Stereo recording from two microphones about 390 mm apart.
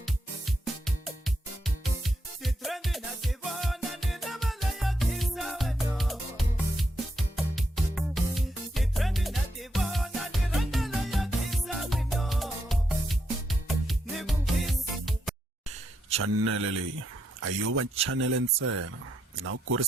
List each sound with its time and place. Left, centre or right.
0.0 s music: centre
16.1 s speech: right